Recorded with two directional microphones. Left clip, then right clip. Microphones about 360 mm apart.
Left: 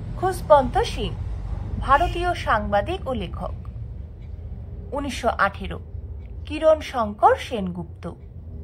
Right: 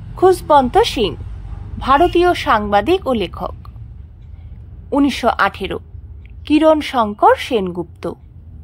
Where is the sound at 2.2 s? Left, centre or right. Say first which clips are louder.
Right 9 dB; centre.